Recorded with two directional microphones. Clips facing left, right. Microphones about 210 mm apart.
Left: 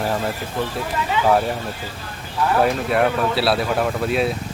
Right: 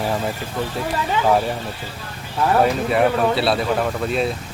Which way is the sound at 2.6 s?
Centre (ahead or behind).